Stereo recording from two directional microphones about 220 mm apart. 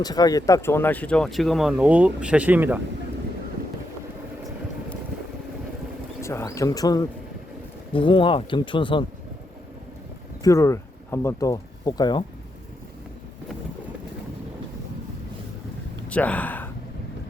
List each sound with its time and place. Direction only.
0.0 s speech: 15° left (ahead or behind); by 2.8 s 5° right (ahead or behind)
6.2 s speech: 15° left (ahead or behind)
10.4 s speech: 15° left (ahead or behind)
16.0 s speech: 5° left (ahead or behind)